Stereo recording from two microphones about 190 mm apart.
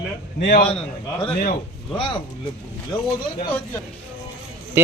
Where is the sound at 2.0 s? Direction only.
25° left (ahead or behind).